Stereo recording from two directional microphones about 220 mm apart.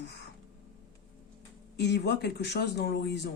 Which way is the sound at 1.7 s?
50° left (ahead or behind).